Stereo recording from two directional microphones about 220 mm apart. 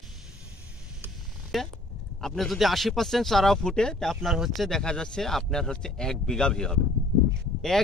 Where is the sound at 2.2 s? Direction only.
Centre (ahead or behind).